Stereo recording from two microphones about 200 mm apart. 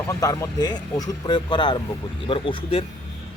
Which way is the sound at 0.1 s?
20° left (ahead or behind).